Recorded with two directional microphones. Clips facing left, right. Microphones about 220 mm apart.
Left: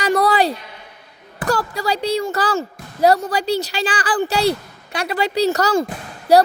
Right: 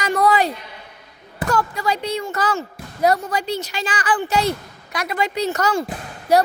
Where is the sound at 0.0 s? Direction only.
35° left (ahead or behind).